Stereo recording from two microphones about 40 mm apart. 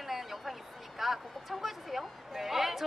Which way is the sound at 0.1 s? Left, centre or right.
Centre.